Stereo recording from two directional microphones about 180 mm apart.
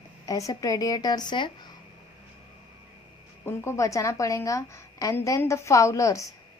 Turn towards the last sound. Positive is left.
turn(degrees=20)  # may be behind; listen again after turning